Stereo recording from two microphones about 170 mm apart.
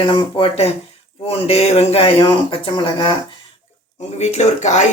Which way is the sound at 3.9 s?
40° left (ahead or behind).